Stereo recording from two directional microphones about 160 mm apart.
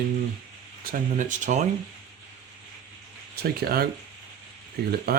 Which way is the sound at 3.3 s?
70° right (ahead or behind).